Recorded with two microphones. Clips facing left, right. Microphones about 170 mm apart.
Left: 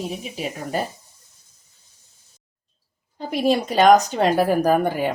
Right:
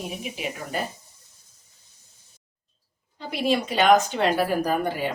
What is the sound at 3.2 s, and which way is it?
Speech, 45° left (ahead or behind).